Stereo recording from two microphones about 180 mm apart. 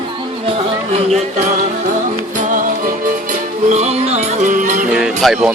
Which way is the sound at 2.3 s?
45° right (ahead or behind).